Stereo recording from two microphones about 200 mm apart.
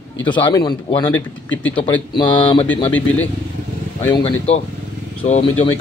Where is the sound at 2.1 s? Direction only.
25° left (ahead or behind).